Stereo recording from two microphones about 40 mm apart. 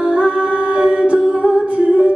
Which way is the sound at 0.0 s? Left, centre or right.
Right.